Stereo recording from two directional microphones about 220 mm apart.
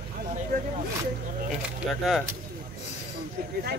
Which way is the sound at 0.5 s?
40° right (ahead or behind).